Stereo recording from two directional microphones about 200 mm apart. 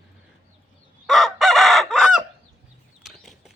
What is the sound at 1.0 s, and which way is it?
Chicken, centre (ahead or behind).